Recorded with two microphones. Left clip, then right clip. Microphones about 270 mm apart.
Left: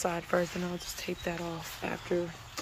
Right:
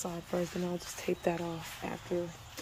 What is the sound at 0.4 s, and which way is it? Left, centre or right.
Speech, centre.